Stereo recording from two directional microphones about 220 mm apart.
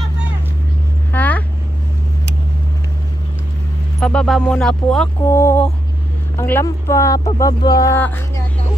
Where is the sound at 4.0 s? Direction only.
5° left (ahead or behind).